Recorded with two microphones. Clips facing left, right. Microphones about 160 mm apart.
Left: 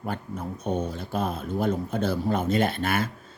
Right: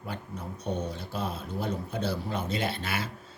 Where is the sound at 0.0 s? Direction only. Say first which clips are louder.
Left 6 dB; 50° left (ahead or behind).